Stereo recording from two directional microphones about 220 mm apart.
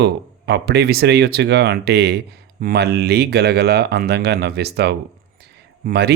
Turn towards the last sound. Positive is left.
turn(degrees=-45)  # may be behind; listen again after turning